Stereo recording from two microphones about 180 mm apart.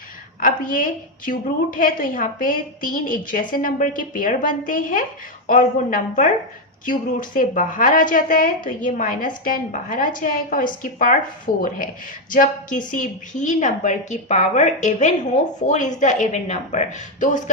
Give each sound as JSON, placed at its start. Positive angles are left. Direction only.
{"t": 0.3, "sound": "a woman's voice", "side_deg": 50}